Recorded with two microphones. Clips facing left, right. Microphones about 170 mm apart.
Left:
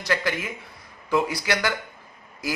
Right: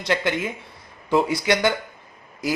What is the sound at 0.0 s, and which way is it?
Speech, 25° right (ahead or behind).